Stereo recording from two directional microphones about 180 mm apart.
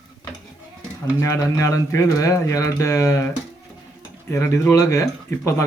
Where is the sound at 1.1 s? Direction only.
15° left (ahead or behind).